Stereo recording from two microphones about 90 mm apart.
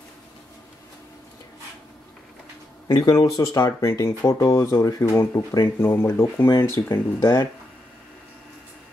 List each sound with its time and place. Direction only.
2.9 s speech: 45° left (ahead or behind)
4.2 s speech: 50° left (ahead or behind)
4.5 s speech: 35° left (ahead or behind)
5.8 s speech: 30° left (ahead or behind)